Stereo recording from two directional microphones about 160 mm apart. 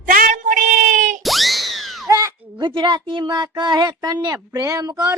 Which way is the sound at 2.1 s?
20° right (ahead or behind).